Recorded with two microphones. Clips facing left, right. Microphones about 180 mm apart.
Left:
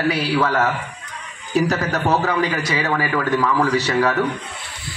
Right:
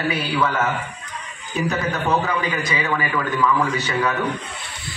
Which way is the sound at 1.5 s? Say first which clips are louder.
Left 4 dB; 80° left.